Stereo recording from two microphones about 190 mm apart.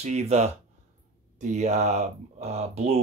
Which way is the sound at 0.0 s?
35° right (ahead or behind).